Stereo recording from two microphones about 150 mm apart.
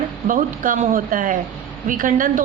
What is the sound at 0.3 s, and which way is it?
A woman's voice, 60° right (ahead or behind).